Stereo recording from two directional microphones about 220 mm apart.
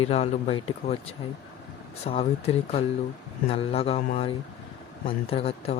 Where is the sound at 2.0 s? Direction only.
25° left (ahead or behind).